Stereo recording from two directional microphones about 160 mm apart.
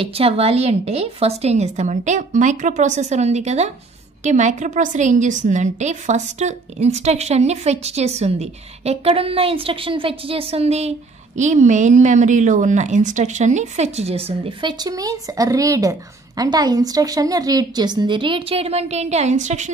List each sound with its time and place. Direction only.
0.0 s a woman's voice: 35° right (ahead or behind)